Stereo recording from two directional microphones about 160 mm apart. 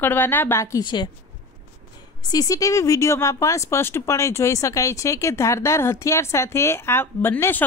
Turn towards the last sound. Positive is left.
turn(degrees=10)  # may be behind; listen again after turning